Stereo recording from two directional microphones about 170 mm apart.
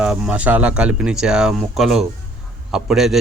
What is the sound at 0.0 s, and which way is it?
Speech, 5° right (ahead or behind).